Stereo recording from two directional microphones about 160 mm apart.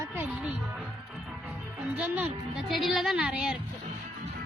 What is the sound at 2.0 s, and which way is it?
Speech, 10° right (ahead or behind).